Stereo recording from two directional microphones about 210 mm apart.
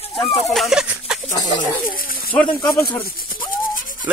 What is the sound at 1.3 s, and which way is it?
Speech, 20° left (ahead or behind).